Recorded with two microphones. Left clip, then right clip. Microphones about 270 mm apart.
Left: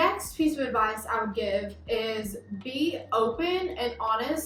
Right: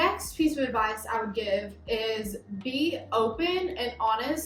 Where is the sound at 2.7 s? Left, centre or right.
Right.